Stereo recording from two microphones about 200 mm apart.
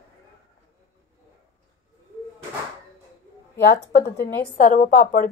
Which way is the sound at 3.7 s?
55° left (ahead or behind).